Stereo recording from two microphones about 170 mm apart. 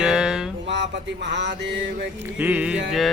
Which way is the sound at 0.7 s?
90° right.